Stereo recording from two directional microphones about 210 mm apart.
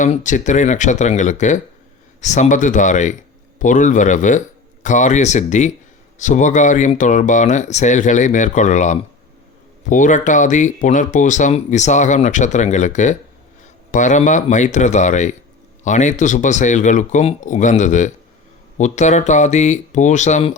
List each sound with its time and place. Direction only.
0.0 s speech: 35° left (ahead or behind)